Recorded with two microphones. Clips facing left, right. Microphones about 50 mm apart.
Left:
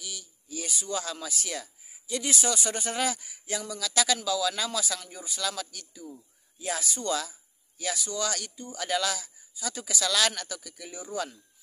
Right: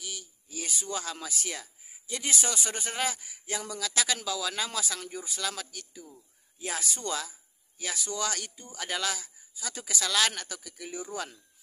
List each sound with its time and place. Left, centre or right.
0.0 s a sound: right
0.9 s speech: right
7.2 s speech: centre